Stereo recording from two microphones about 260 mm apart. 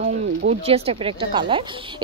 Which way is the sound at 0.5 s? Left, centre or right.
Right.